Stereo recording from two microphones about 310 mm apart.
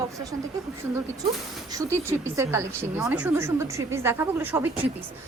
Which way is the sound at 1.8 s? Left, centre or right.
Centre.